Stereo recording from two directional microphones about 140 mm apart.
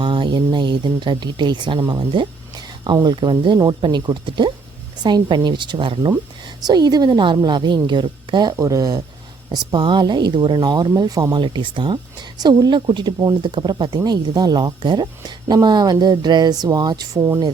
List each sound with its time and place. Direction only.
0.0 s speech: 35° right (ahead or behind)